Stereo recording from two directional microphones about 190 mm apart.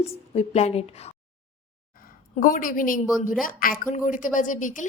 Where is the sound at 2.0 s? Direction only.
45° left (ahead or behind).